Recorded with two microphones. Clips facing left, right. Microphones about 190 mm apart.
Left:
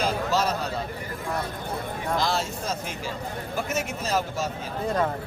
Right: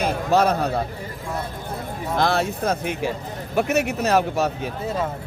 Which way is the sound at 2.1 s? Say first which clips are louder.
Right 7 dB; 60° right (ahead or behind).